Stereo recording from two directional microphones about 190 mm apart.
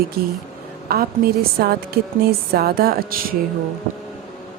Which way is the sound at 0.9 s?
55° right (ahead or behind).